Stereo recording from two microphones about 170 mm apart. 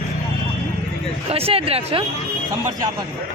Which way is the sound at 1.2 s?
35° right (ahead or behind).